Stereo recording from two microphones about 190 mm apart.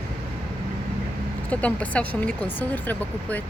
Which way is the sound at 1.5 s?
5° left (ahead or behind).